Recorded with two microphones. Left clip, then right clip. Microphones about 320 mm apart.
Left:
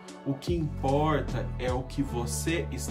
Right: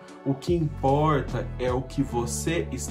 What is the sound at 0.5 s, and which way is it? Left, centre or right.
Speech, centre.